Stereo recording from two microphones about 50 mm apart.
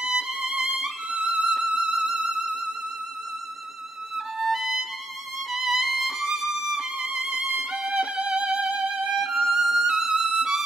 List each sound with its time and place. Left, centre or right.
0.0 s violin: centre
1.7 s music: centre
4.4 s violin: centre
8.2 s music: centre
8.6 s violin: centre
8.9 s violin: centre